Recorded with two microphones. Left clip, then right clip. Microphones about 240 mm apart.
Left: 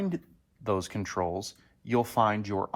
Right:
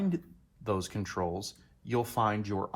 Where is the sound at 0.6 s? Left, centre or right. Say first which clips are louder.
Left 3 dB; left.